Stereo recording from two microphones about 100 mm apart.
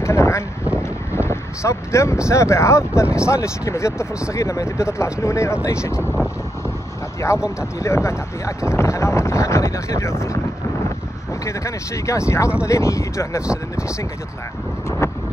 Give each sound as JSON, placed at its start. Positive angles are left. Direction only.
{"t": 0.0, "sound": "a sound", "side_deg": 30}
{"t": 1.1, "sound": "vehicle", "side_deg": 25}
{"t": 2.2, "sound": "speech", "side_deg": 30}
{"t": 7.2, "sound": "speech", "side_deg": 30}
{"t": 11.4, "sound": "speech", "side_deg": 30}